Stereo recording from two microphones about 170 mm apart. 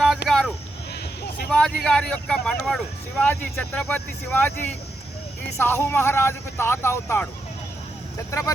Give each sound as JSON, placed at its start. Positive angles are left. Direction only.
{"t": 0.3, "sound": "a sound", "side_deg": 0}
{"t": 1.5, "sound": "speech", "side_deg": 5}
{"t": 8.3, "sound": "speech", "side_deg": 20}